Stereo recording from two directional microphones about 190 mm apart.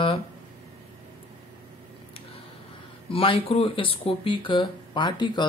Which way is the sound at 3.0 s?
30° left (ahead or behind).